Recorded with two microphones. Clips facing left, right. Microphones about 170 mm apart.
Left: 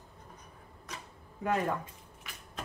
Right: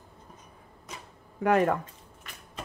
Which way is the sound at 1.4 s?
75° right (ahead or behind).